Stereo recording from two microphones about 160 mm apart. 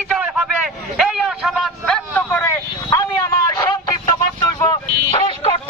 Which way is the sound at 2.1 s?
10° left (ahead or behind).